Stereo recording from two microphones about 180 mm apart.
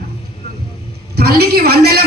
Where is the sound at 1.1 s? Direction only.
60° right (ahead or behind).